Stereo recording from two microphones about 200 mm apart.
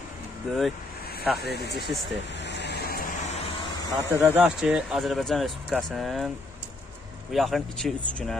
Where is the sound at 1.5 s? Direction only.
55° left (ahead or behind).